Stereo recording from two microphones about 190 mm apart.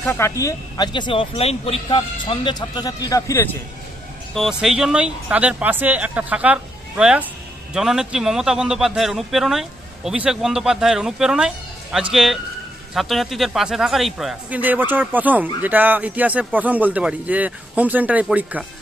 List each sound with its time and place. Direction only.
0.0 s speech: 15° left (ahead or behind)
4.3 s a man's voice: centre (ahead or behind)